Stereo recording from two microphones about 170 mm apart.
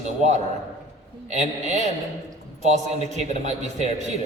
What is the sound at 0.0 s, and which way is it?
A man's voice, 45° right (ahead or behind).